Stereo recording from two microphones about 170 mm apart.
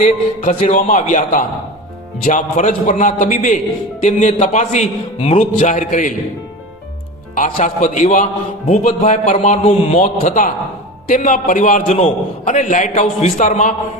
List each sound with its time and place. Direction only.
0.0 s a man's voice: 45° left (ahead or behind)
7.5 s a man's voice: 45° left (ahead or behind)